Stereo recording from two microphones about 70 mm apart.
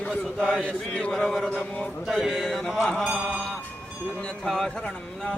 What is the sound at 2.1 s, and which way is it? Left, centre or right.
Speech, centre.